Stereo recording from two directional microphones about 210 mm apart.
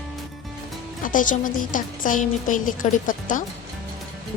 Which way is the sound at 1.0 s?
40° left (ahead or behind).